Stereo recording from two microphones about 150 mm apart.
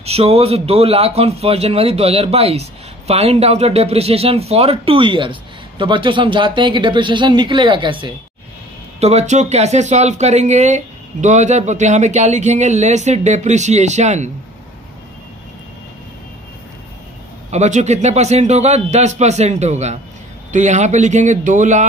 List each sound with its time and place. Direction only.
0.0 s a man's voice: 45° right (ahead or behind)
9.0 s speech: 50° right (ahead or behind)
17.5 s speech: 50° right (ahead or behind)